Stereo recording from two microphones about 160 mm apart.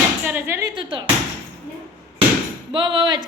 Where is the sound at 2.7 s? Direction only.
30° right (ahead or behind).